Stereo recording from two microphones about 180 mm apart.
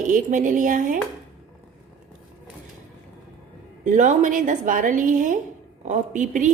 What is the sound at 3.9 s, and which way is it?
A woman's voice, 45° right (ahead or behind).